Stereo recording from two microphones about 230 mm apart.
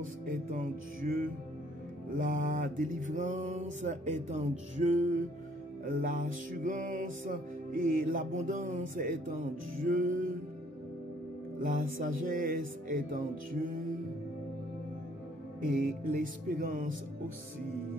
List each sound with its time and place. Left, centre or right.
0.0 s music: right
11.6 s music: right
15.6 s music: right